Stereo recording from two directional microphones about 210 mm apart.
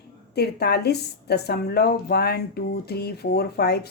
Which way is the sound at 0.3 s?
50° left (ahead or behind).